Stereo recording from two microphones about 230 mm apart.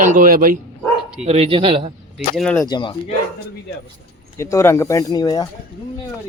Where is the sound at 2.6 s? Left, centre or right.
Centre.